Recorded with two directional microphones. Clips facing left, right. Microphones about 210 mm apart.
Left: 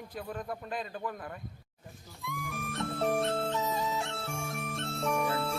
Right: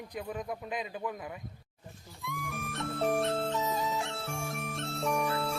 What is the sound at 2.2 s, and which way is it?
Music, centre (ahead or behind).